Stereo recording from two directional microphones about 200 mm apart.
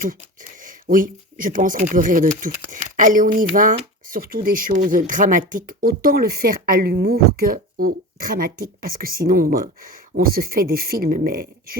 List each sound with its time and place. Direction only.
0.6 s speech: 40° right (ahead or behind)